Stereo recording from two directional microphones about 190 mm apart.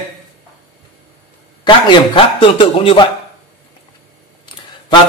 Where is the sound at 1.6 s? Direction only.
25° left (ahead or behind).